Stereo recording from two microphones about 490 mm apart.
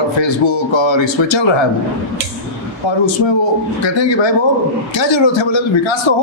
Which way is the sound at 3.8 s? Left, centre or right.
Left.